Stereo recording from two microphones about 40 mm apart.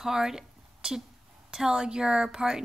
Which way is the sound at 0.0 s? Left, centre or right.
Centre.